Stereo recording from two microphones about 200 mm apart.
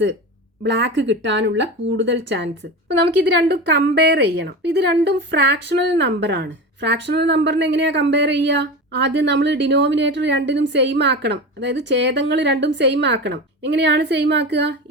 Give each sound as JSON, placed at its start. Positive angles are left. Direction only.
{"t": 0.6, "sound": "a woman's voice", "side_deg": -60}